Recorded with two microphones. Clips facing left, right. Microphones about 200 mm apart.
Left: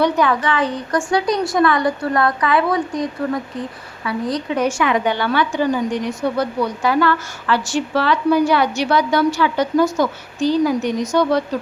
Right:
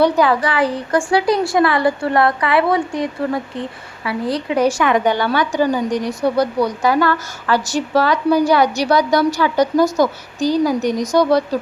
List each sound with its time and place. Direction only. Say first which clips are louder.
0.0 s a woman's voice: right 2 dB; 35° right (ahead or behind)